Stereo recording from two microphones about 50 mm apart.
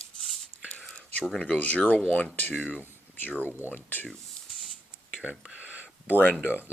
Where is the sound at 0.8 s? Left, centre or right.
Centre.